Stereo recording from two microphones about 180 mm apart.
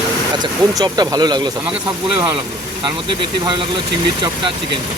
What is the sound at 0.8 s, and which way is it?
Speech, 25° right (ahead or behind).